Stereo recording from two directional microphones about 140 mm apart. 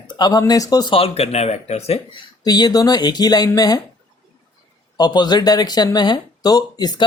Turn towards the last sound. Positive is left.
turn(degrees=30)  # may be behind; listen again after turning